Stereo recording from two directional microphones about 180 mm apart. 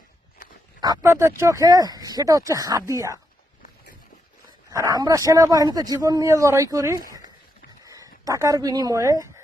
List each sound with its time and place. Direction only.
0.8 s speech: 20° right (ahead or behind)
4.9 s speech: 20° right (ahead or behind)